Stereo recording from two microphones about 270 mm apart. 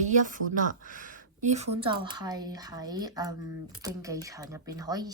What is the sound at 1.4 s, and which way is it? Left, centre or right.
Speech, right.